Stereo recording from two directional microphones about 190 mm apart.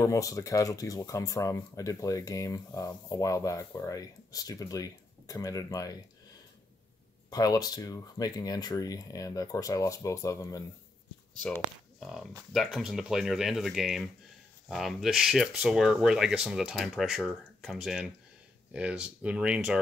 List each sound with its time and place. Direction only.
0.0 s speech: 15° left (ahead or behind)
7.2 s speech: 20° left (ahead or behind)
12.0 s speech: centre (ahead or behind)